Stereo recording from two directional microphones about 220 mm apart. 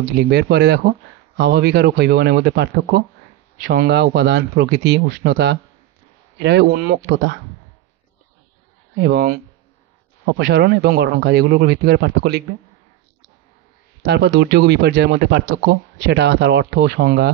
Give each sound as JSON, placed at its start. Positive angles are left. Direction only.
{"t": 0.3, "sound": "speech", "side_deg": -50}
{"t": 9.0, "sound": "speech", "side_deg": -45}
{"t": 14.0, "sound": "speech", "side_deg": -50}